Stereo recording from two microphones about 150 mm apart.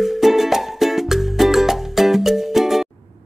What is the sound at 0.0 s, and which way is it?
Music, centre (ahead or behind).